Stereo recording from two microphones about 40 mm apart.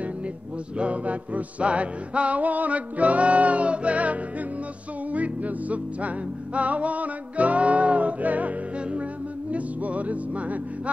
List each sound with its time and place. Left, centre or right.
0.7 s music: right